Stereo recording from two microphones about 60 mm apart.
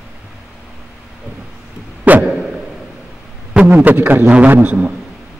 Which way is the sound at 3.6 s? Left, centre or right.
Right.